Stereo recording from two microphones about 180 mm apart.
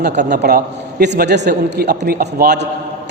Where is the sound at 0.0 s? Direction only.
65° right (ahead or behind).